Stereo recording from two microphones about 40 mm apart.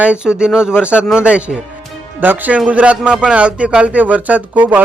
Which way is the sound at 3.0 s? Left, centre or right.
Right.